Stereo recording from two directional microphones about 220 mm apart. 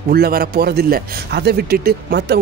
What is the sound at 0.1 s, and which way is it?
Speech, 45° right (ahead or behind).